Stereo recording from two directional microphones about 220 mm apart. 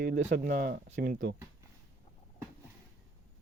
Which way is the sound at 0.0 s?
35° right (ahead or behind).